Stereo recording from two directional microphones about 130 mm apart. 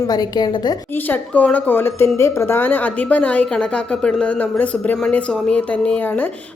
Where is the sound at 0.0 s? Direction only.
30° left (ahead or behind).